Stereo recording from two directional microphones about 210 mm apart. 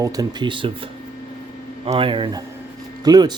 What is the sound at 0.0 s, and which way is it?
Speech, 15° right (ahead or behind).